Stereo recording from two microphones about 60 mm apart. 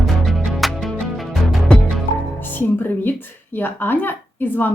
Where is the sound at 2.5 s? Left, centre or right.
Left.